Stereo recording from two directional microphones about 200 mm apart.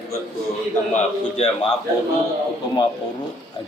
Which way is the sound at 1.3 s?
30° left (ahead or behind).